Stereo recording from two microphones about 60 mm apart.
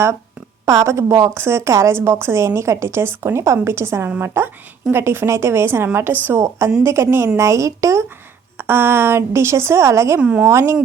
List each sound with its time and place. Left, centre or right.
0.6 s a woman's voice: right
1.3 s a woman's voice: right
3.4 s a woman's voice: right
6.8 s a woman's voice: right
8.5 s a woman's voice: right
10.2 s a woman's voice: centre
10.4 s a woman's voice: right